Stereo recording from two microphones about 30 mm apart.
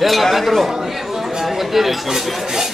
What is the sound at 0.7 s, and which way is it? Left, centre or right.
Chatter, centre.